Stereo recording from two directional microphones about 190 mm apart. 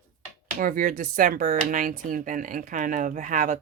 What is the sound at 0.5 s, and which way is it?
Speech, 45° right (ahead or behind).